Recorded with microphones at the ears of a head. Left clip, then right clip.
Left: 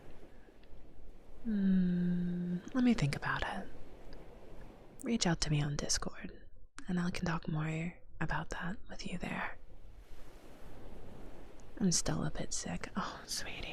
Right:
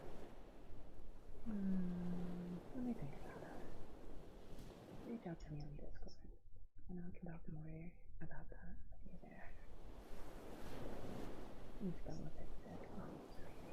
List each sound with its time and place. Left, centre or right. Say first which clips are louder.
1.5 s a sound: left 12 dB; left
5.0 s speech: left 18 dB; left
11.7 s speech: left 18 dB; left